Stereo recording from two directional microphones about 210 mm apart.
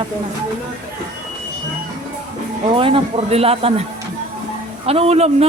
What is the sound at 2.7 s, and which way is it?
Speech, 25° right (ahead or behind).